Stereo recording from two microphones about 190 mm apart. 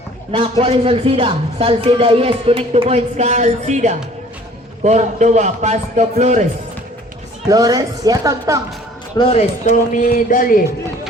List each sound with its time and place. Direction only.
0.3 s a man's voice: 30° right (ahead or behind)
7.5 s speech: 20° right (ahead or behind)
9.1 s speech: 35° left (ahead or behind)